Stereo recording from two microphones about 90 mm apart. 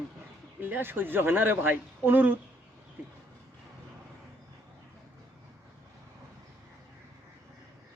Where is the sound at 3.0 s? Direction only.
20° right (ahead or behind).